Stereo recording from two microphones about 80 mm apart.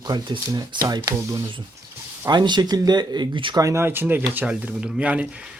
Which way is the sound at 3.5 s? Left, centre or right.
Right.